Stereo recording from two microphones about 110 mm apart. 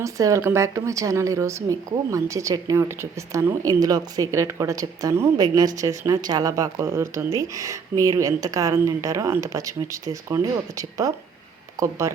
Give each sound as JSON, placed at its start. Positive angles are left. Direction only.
{"t": 0.0, "sound": "speech", "side_deg": -30}